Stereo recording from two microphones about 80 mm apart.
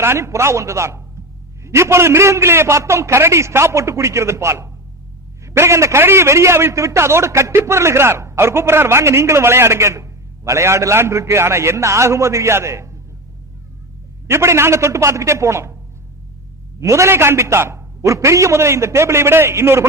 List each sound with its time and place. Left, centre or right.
0.0 s a man's voice: right
14.3 s a man's voice: right
16.8 s a man's voice: right